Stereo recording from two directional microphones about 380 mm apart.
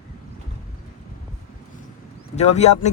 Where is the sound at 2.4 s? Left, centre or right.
Centre.